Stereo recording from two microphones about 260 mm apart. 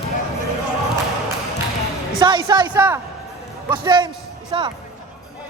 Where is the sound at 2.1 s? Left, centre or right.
Centre.